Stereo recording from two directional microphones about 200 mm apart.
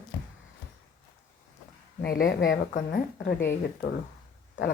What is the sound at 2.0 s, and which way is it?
Speech, 50° left (ahead or behind).